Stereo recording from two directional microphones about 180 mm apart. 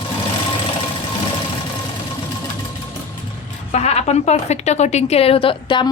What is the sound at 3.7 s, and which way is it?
A woman's voice, 35° left (ahead or behind).